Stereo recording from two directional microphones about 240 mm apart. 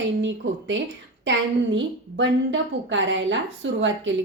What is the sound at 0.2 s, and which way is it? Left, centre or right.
A woman's voice, right.